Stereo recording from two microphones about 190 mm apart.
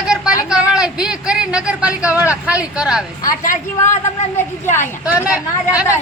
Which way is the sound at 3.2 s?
45° left (ahead or behind).